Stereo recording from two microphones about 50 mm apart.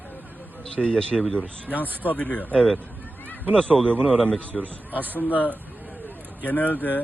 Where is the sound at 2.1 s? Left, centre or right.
Left; by 4.4 s centre.